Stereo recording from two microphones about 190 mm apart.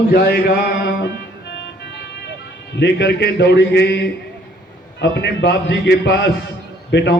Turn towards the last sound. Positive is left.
turn(degrees=65)  # may be behind; listen again after turning